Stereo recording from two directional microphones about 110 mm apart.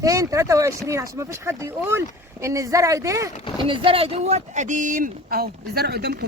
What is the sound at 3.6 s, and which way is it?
Speech, 55° right (ahead or behind).